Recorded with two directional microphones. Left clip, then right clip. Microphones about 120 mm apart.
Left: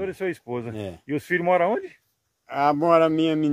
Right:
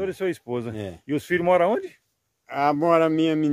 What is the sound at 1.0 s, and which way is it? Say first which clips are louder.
Speech: right 1 dB; 45° right (ahead or behind).